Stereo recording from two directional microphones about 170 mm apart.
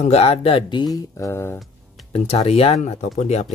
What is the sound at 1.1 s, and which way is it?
Mantra, 15° left (ahead or behind).